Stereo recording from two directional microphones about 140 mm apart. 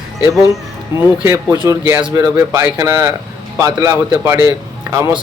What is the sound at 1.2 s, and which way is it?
Speech, 20° right (ahead or behind).